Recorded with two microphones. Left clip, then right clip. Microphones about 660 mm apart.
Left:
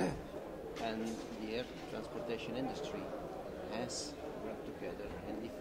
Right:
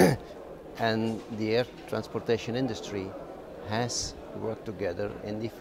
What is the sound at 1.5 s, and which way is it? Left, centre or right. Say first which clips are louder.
Speech: right 15 dB; right.